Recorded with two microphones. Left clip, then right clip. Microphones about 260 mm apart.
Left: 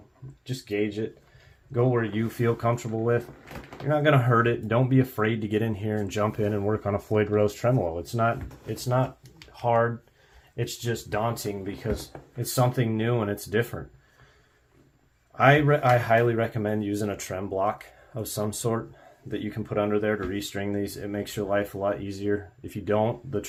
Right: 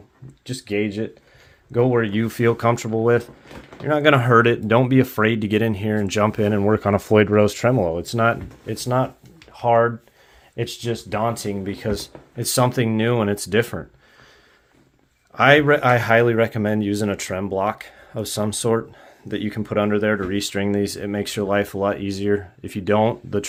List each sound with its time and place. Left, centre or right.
0.4 s speech: right
15.4 s speech: right